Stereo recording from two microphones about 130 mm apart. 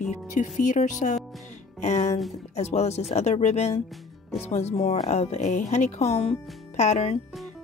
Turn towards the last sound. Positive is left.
turn(degrees=55)  # may be behind; listen again after turning